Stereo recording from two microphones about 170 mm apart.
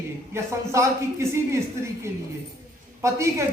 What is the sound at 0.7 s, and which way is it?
Speech, 15° right (ahead or behind).